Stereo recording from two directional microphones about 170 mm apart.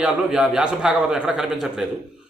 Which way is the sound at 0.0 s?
5° right (ahead or behind).